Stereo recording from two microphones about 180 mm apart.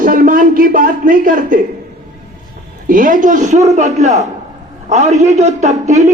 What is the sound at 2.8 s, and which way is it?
A man's voice, 50° right (ahead or behind).